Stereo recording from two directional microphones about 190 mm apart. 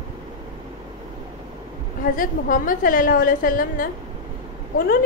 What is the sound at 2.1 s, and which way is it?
A woman's voice, 45° left (ahead or behind).